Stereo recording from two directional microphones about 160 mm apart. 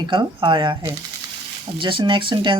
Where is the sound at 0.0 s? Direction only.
30° right (ahead or behind).